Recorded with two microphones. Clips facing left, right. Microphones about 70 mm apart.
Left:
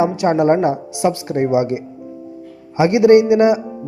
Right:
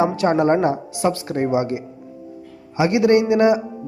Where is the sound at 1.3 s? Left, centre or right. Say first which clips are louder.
Left 4 dB; centre.